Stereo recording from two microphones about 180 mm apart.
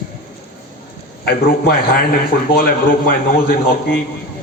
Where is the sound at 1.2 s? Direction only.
60° left (ahead or behind).